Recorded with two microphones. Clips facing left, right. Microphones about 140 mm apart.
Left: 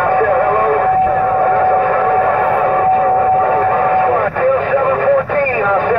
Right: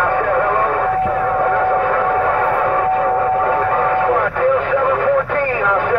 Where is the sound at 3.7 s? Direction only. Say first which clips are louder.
Left 3 dB; 15° left (ahead or behind).